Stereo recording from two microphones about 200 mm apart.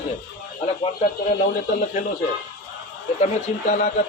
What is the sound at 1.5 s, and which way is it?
Speech, 40° left (ahead or behind).